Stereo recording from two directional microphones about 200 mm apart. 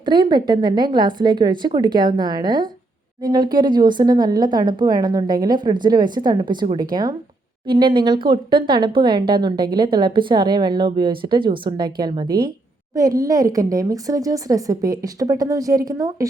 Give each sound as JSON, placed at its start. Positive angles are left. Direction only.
{"t": 0.0, "sound": "speech", "side_deg": -20}